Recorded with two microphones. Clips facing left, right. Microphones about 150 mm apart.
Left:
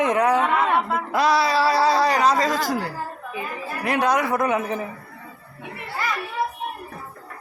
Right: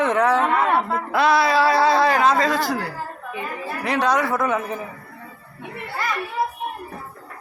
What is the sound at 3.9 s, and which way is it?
Speech, 50° left (ahead or behind).